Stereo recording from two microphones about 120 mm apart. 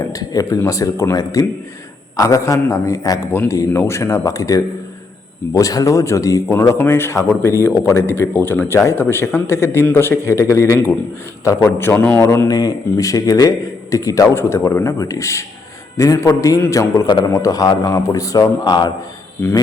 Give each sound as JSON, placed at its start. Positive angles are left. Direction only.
{"t": 0.1, "sound": "a man's voice", "side_deg": 30}
{"t": 12.5, "sound": "a man's voice", "side_deg": 30}